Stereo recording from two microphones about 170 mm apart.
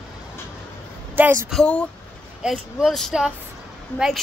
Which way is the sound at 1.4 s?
5° left (ahead or behind).